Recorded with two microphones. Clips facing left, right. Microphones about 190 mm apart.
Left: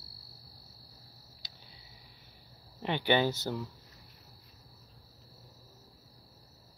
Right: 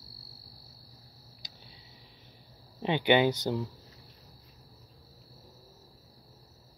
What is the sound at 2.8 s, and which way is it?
Speech, 15° right (ahead or behind).